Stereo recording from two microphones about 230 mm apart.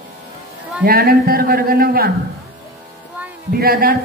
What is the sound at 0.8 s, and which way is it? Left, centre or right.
A man's voice, right.